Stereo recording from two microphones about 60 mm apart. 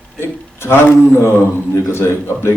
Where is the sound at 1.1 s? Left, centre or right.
Left.